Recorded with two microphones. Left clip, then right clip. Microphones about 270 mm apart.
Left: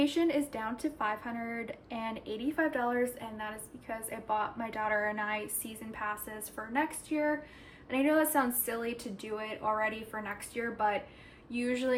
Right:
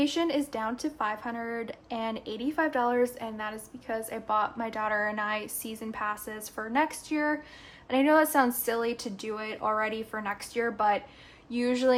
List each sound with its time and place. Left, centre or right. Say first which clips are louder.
0.0 s a woman's voice: right 2 dB; right